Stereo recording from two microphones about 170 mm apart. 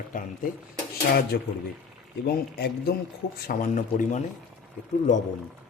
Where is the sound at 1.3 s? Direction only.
65° left (ahead or behind).